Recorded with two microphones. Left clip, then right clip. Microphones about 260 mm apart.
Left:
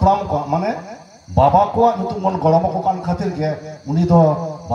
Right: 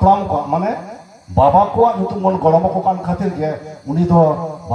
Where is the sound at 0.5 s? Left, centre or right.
Left.